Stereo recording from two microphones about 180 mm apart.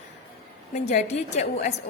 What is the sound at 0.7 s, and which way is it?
Speech, 40° left (ahead or behind).